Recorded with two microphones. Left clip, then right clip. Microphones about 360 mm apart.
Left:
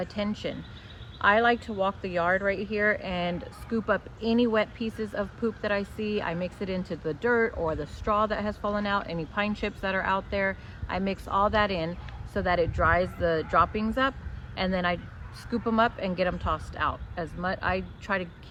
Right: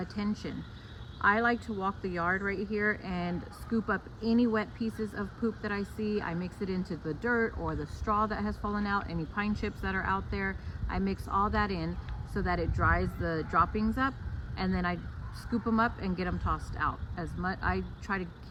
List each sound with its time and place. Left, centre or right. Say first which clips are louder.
0.0 s a woman's voice: left 6 dB; centre